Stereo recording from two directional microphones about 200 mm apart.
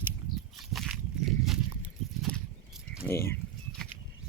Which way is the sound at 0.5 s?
Centre (ahead or behind).